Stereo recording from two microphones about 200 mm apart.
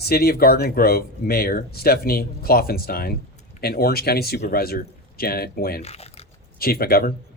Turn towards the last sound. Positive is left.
turn(degrees=50)  # may be behind; listen again after turning